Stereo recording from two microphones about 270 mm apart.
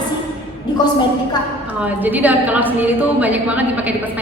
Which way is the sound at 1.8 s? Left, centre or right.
Centre.